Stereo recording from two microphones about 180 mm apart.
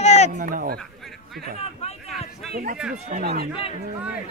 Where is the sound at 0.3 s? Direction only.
50° right (ahead or behind).